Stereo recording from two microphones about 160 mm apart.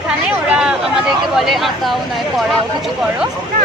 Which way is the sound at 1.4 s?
Centre (ahead or behind).